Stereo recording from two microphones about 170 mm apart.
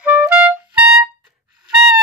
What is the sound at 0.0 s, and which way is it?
Music, 10° right (ahead or behind).